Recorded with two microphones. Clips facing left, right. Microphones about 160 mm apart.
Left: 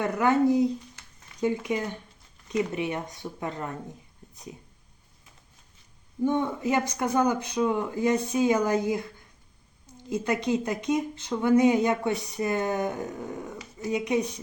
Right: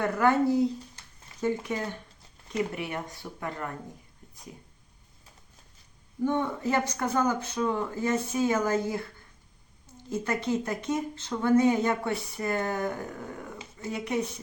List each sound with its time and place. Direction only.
0.0 s speech: 15° left (ahead or behind)
1.7 s speech: 15° left (ahead or behind)
6.2 s speech: 15° left (ahead or behind)